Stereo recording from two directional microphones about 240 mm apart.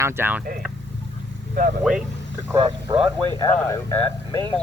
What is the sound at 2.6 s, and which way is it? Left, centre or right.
Speech, right.